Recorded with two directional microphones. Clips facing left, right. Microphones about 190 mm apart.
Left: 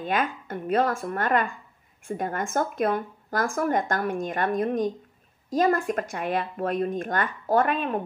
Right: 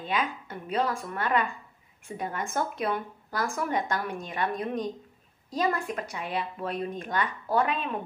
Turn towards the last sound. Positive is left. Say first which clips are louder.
# left 4 dB
turn(degrees=50)  # may be behind; listen again after turning